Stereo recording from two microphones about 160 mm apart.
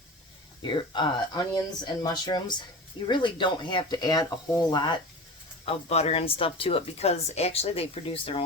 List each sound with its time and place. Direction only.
0.6 s speech: 30° left (ahead or behind)
5.6 s a woman's voice: 40° left (ahead or behind)